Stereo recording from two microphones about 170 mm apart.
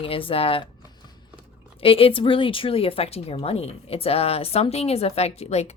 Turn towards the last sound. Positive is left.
turn(degrees=40)  # may be behind; listen again after turning